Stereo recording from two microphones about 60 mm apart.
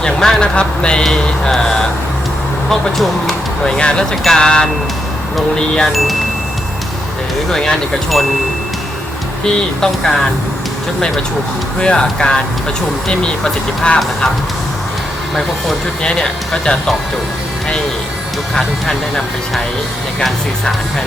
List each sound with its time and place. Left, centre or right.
0.0 s speech: centre
3.0 s speech: centre
5.9 s speech: centre
7.5 s speech: centre
9.8 s speech: centre
11.8 s speech: centre
16.0 s speech: centre
18.5 s speech: centre